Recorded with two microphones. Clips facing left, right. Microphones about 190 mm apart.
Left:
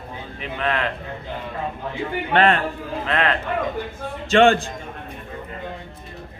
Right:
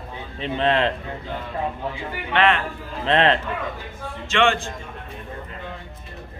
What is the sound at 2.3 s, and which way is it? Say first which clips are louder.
Speech: left 2 dB; 40° left (ahead or behind).